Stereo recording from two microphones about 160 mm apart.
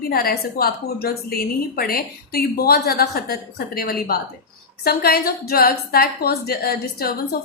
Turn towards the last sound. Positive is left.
turn(degrees=70)  # may be behind; listen again after turning